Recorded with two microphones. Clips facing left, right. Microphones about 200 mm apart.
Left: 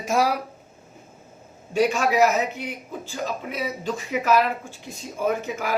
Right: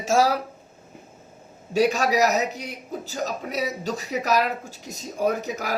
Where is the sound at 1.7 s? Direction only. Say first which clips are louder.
Even; 40° right (ahead or behind).